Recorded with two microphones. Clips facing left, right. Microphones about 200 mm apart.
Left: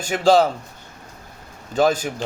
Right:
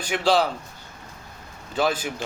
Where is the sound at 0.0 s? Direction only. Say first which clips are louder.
Left 5 dB; 45° left (ahead or behind).